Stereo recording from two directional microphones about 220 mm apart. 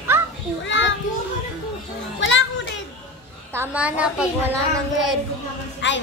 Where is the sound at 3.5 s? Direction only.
10° right (ahead or behind).